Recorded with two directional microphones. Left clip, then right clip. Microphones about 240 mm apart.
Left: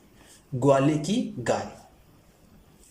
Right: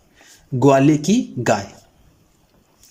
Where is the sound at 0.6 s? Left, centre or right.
Right.